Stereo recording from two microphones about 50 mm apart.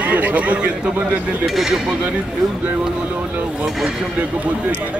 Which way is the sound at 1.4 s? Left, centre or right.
Centre.